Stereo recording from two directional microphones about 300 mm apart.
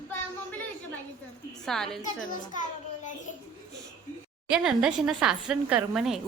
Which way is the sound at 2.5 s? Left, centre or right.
Left.